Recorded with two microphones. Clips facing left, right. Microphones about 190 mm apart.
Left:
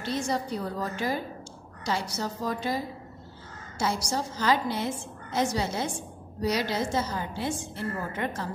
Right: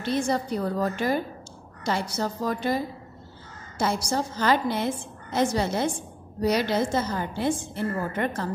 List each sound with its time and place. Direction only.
0.0 s a woman's voice: 60° right (ahead or behind)